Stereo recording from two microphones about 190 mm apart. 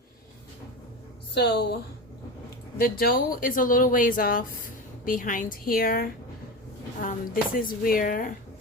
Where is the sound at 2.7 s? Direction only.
50° left (ahead or behind).